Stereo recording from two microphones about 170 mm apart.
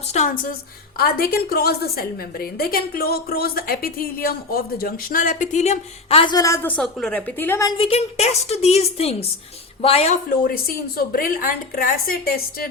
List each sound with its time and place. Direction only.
0.1 s a woman's voice: 50° left (ahead or behind)
0.9 s a woman's voice: 65° left (ahead or behind); by 7.7 s 15° left (ahead or behind)
7.8 s a woman's voice: 35° left (ahead or behind)
10.4 s a woman's voice: 60° left (ahead or behind)